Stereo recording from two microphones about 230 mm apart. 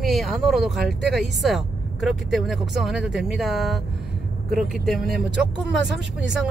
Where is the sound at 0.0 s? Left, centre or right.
Centre.